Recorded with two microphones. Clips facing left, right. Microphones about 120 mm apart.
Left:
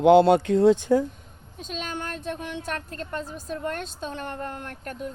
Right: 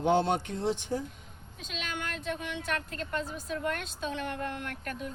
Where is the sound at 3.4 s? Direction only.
40° left (ahead or behind).